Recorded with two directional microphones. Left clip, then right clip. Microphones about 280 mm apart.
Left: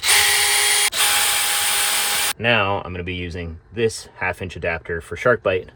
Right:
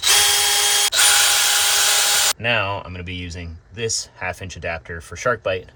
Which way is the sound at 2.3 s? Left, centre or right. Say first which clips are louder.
Left 2 dB; left.